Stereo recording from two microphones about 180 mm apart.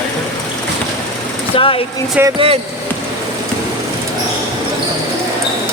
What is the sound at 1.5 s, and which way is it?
Speech, 30° left (ahead or behind).